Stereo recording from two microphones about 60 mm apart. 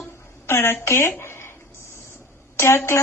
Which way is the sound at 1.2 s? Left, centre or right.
Left.